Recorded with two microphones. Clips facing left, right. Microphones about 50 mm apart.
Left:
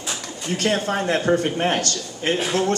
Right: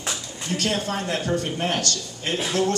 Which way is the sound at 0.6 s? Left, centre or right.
Left.